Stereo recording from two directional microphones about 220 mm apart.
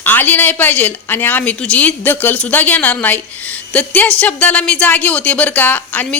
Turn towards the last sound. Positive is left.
turn(degrees=10)  # may be behind; listen again after turning